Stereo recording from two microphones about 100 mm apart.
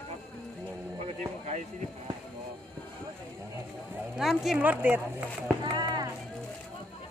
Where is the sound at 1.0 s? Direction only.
90° right.